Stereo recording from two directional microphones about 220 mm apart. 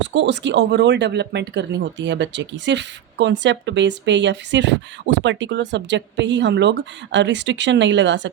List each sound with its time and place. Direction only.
0.0 s speech: 55° right (ahead or behind)